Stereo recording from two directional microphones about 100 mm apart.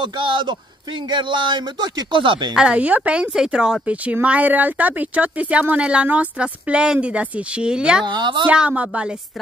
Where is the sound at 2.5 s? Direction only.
10° right (ahead or behind).